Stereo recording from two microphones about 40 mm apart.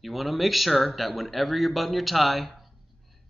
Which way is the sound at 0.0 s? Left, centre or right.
Centre.